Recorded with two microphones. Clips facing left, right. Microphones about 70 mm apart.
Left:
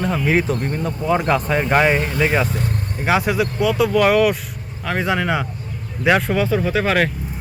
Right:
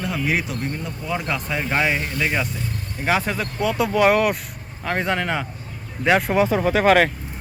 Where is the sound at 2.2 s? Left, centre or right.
Centre.